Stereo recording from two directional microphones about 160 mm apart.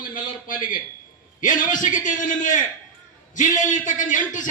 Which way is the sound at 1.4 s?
55° left (ahead or behind).